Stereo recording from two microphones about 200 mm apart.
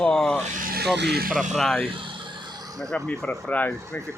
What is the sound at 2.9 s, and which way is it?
Speech, 5° left (ahead or behind).